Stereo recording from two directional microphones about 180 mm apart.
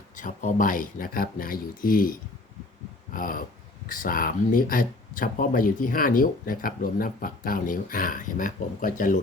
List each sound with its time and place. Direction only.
0.2 s speech: 45° left (ahead or behind)